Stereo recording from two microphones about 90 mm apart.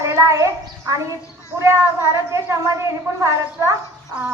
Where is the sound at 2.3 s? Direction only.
30° right (ahead or behind).